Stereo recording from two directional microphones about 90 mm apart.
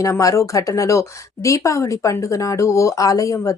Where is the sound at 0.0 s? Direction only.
35° left (ahead or behind).